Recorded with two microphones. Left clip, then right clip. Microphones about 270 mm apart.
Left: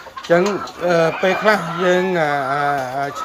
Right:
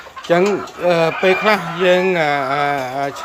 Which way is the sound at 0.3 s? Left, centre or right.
Centre.